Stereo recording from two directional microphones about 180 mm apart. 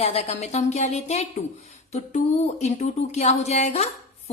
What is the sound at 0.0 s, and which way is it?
A woman's voice, 35° left (ahead or behind).